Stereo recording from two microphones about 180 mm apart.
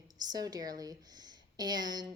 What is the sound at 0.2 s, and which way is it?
A woman's voice, 20° right (ahead or behind).